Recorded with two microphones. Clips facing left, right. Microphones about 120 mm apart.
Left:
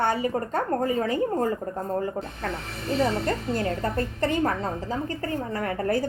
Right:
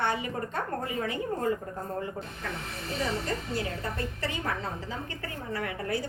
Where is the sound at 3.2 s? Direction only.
45° left (ahead or behind).